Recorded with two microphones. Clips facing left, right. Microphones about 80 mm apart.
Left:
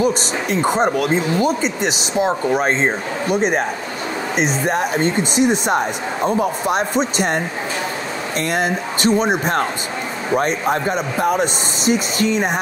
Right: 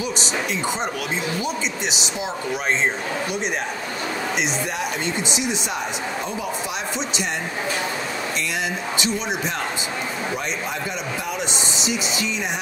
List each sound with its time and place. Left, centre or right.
0.0 s speech: left
8.5 s speech: left